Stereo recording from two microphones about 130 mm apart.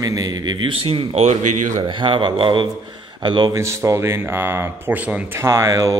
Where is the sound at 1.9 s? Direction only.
40° right (ahead or behind).